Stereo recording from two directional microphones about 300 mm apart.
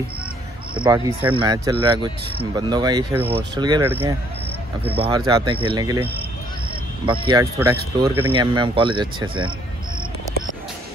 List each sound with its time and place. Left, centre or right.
0.7 s speech: centre